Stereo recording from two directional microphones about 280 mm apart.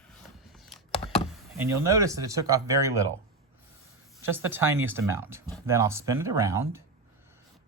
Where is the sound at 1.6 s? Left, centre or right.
Centre.